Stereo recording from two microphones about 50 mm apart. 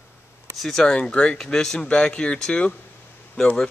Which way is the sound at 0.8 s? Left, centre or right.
Centre.